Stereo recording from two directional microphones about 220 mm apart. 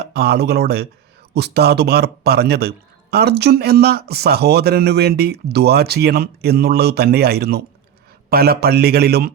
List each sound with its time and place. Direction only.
0.0 s a man's voice: 45° right (ahead or behind)